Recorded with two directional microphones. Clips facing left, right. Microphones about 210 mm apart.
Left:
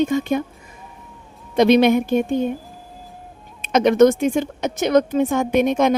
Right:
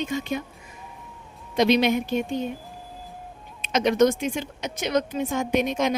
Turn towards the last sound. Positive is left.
turn(degrees=55)  # may be behind; listen again after turning